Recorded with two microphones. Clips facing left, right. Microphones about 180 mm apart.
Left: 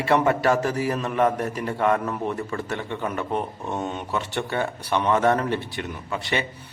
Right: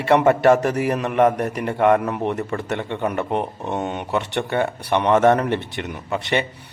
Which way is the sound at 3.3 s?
20° right (ahead or behind).